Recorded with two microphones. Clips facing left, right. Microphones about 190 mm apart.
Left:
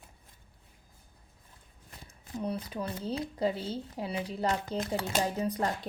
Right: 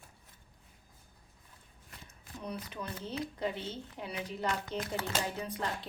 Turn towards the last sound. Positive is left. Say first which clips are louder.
# left 6 dB
turn(degrees=40)  # may be behind; listen again after turning